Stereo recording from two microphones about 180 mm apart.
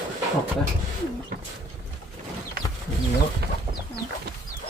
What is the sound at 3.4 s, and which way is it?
Chicken, 65° right (ahead or behind).